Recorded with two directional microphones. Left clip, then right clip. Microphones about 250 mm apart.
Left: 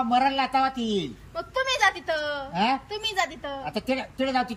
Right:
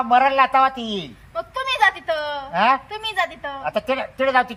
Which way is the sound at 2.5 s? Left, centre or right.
Centre.